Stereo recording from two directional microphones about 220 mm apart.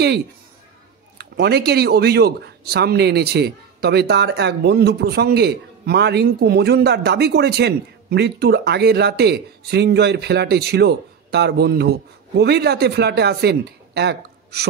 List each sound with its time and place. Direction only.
1.1 s speech: 50° right (ahead or behind)